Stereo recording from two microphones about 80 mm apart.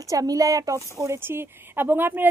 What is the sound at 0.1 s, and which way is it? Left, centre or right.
Speech, right.